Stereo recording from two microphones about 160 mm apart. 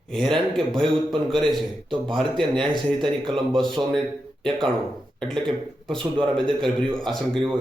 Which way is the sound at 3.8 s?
20° right (ahead or behind).